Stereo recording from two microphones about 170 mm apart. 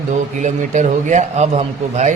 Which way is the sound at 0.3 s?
45° right (ahead or behind).